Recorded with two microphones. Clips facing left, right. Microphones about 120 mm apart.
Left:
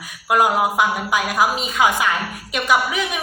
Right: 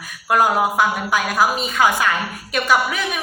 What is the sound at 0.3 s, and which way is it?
A woman's voice, 15° left (ahead or behind).